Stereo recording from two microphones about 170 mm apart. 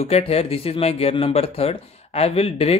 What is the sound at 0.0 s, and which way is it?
Speech, 35° left (ahead or behind).